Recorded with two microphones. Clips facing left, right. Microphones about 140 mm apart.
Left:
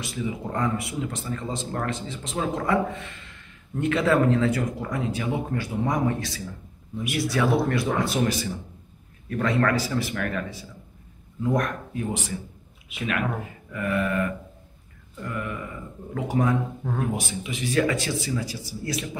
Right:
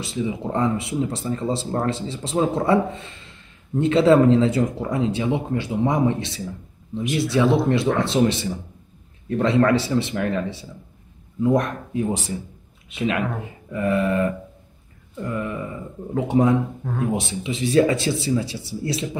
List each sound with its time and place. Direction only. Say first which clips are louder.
0.0 s speech: right 4 dB; 25° right (ahead or behind)